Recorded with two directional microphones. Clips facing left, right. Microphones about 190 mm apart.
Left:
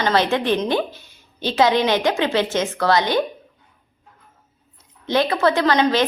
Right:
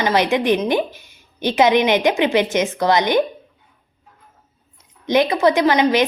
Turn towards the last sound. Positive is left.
turn(degrees=-15)  # may be behind; listen again after turning